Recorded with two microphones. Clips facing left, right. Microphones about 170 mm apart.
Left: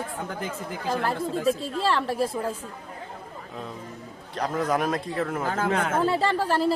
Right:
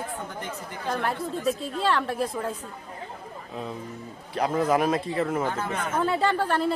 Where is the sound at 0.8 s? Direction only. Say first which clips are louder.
Left 1 dB; 5° left (ahead or behind).